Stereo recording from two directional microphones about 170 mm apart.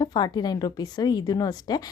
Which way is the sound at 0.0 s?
25° left (ahead or behind).